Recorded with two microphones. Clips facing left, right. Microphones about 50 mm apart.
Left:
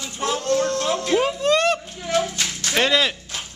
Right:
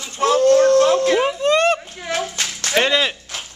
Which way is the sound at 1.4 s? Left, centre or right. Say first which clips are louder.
Right 3 dB; right.